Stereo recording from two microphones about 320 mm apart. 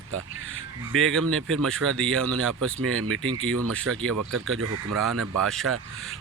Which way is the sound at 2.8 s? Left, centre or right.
Right.